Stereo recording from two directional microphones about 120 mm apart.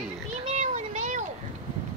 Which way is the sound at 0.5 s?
75° right (ahead or behind).